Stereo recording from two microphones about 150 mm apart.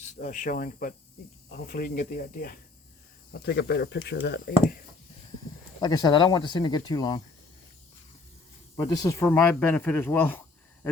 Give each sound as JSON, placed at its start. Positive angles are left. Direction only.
{"t": 0.0, "sound": "speech", "side_deg": 55}
{"t": 1.5, "sound": "speech", "side_deg": 90}
{"t": 3.3, "sound": "speech", "side_deg": 90}
{"t": 5.8, "sound": "speech", "side_deg": 25}
{"t": 8.8, "sound": "speech", "side_deg": 25}